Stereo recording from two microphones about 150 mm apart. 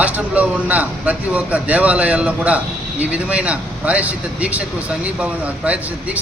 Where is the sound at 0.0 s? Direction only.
10° right (ahead or behind).